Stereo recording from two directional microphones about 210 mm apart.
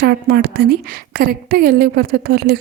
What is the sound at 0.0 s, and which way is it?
A woman's voice, 50° right (ahead or behind).